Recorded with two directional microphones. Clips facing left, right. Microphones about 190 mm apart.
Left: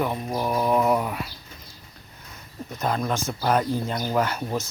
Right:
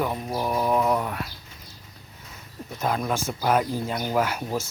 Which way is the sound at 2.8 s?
5° right (ahead or behind).